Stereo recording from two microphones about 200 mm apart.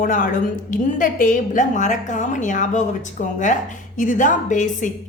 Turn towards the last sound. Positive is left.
turn(degrees=40)  # may be behind; listen again after turning